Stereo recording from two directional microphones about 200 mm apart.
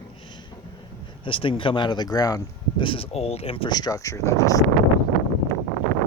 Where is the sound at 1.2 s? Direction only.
25° left (ahead or behind).